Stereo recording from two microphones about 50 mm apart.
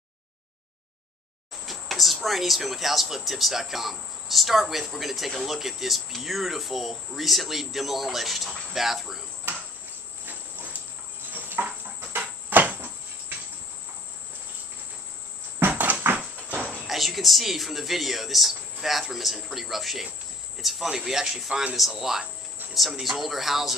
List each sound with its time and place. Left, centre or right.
1.7 s speech: centre
10.2 s dog: right
11.3 s a sound: right
16.0 s a sound: right
16.4 s music: right
16.8 s speech: centre